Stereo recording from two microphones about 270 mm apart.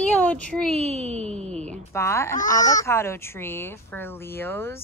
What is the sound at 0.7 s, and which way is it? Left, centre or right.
Speech, right.